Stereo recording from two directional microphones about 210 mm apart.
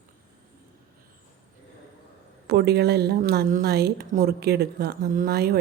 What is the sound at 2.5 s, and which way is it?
A woman's voice, 50° right (ahead or behind).